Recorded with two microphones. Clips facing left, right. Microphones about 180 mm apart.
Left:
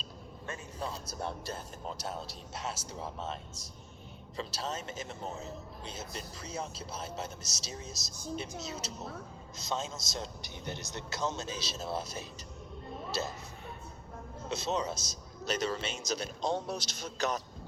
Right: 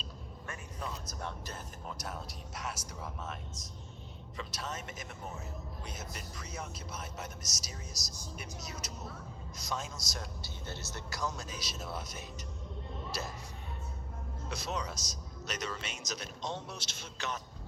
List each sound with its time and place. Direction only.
0.4 s a man's voice: 30° left (ahead or behind)
4.4 s a man's voice: 30° left (ahead or behind)
14.5 s a man's voice: 25° left (ahead or behind)